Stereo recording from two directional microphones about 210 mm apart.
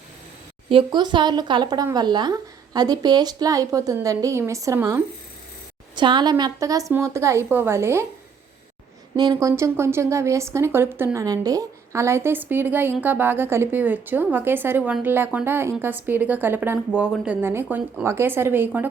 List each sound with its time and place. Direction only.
0.7 s a woman's voice: 25° right (ahead or behind)
9.1 s a woman's voice: 20° right (ahead or behind)